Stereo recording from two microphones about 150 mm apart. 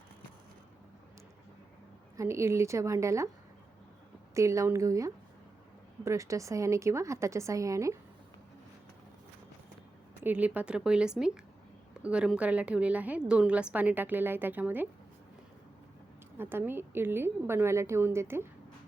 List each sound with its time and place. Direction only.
2.1 s a woman's voice: 20° right (ahead or behind)
4.4 s a woman's voice: 20° right (ahead or behind)
10.2 s a woman's voice: 10° right (ahead or behind)
16.4 s a woman's voice: 15° right (ahead or behind)